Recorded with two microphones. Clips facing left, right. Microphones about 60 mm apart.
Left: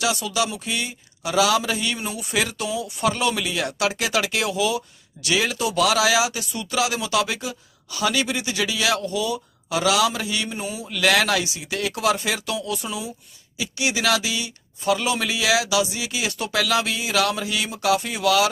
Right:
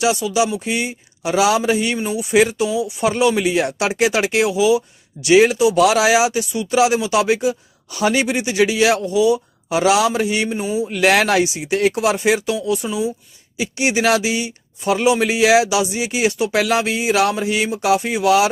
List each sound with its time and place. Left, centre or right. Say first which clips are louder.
0.2 s speech: right 6 dB; centre
2.0 s speech: right 8 dB; centre
2.3 s speech: right 10 dB; right
2.6 s speech: right 7 dB; centre
3.3 s speech: right 8 dB; right
5.2 s speech: right 10 dB; right
6.5 s speech: right 8 dB; centre
6.7 s speech: right 7 dB; right
9.0 s speech: right 9 dB; centre
13.6 s speech: right 6 dB; right